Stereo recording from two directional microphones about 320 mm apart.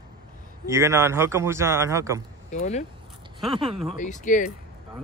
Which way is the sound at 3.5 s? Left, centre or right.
Centre.